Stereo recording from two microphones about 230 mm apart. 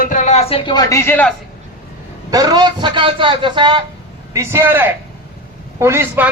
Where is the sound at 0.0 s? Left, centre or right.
Left; by 1.3 s centre.